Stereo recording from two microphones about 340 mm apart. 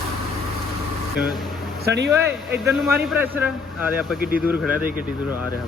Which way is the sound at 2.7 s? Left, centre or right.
Centre.